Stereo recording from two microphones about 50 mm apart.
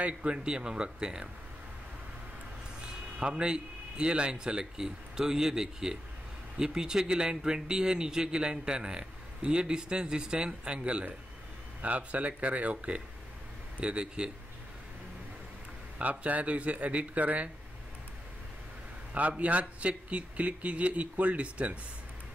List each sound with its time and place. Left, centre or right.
0.0 s speech: right
3.2 s a man's voice: centre
16.0 s a man's voice: right
19.1 s a man's voice: right